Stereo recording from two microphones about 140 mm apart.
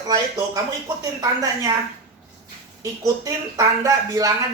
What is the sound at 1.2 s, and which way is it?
Speech, 30° right (ahead or behind).